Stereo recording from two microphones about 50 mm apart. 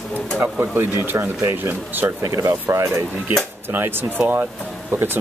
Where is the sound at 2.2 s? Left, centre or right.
Right.